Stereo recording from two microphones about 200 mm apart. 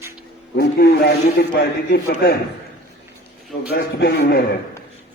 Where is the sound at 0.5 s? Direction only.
50° left (ahead or behind).